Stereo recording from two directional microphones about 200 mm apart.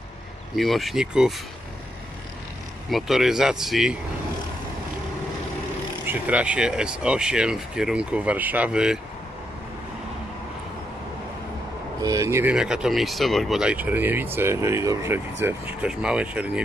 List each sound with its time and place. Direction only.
0.6 s speech: centre (ahead or behind)
2.9 s speech: centre (ahead or behind)
6.0 s speech: 5° right (ahead or behind)
12.0 s speech: 15° right (ahead or behind)